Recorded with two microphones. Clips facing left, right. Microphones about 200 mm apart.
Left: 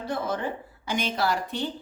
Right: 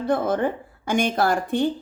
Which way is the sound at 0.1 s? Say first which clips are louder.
Right 7 dB; 50° right (ahead or behind).